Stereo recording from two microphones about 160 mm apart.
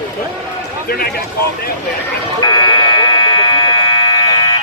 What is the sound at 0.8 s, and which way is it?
Speech, 75° left (ahead or behind).